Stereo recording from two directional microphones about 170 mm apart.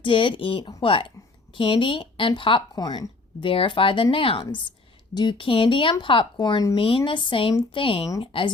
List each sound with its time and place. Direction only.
0.0 s speech: 30° left (ahead or behind)